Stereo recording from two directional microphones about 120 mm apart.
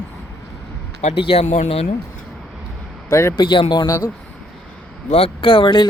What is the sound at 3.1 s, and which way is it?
Speech, 25° left (ahead or behind).